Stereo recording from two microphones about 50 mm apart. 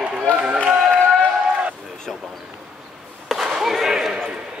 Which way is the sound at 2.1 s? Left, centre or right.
Centre.